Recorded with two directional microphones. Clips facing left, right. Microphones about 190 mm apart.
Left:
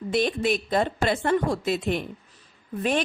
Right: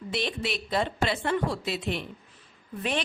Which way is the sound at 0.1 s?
50° left (ahead or behind).